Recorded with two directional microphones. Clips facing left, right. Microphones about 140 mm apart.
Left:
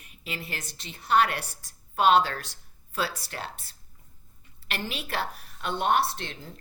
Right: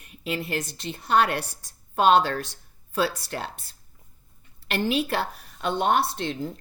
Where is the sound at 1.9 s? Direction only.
30° right (ahead or behind).